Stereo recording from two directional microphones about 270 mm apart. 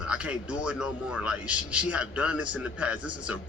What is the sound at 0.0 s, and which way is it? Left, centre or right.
A man's voice, centre.